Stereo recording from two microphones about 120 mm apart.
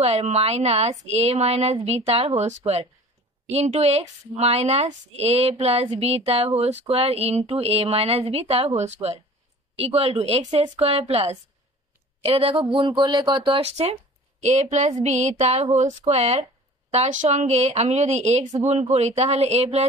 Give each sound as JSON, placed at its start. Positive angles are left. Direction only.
{"t": 0.0, "sound": "speech", "side_deg": -65}
{"t": 9.8, "sound": "speech", "side_deg": -55}
{"t": 13.6, "sound": "speech", "side_deg": -60}
{"t": 14.4, "sound": "a woman's voice", "side_deg": -70}
{"t": 16.9, "sound": "a woman's voice", "side_deg": -80}